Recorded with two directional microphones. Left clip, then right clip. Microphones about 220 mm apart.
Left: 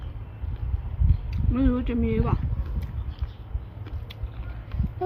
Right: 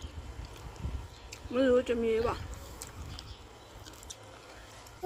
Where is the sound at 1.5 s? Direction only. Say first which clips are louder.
Right 1 dB; 10° left (ahead or behind).